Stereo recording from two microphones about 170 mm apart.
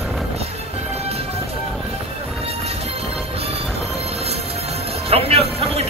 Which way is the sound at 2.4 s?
35° right (ahead or behind).